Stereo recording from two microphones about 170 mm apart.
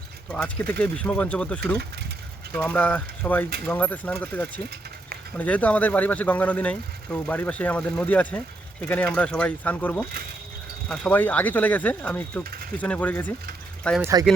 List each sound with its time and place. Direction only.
0.3 s speech: 5° left (ahead or behind)
14.0 s speech: 20° right (ahead or behind)